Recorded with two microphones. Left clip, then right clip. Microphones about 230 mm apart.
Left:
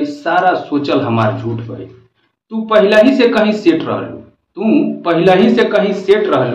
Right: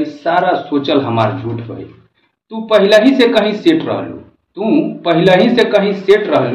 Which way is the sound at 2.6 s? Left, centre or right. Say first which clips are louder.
Even; centre.